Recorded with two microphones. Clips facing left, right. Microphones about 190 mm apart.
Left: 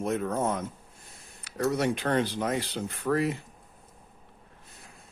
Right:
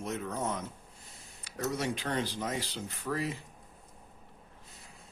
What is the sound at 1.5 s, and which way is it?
Speech, 65° left (ahead or behind).